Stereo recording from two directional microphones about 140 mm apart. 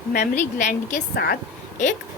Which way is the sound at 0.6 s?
60° left (ahead or behind).